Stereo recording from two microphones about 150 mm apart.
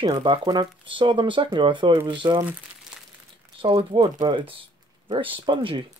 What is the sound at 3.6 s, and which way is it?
Speech, 35° right (ahead or behind).